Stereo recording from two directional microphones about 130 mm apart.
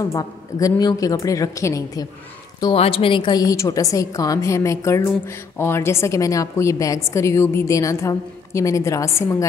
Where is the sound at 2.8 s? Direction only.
45° left (ahead or behind).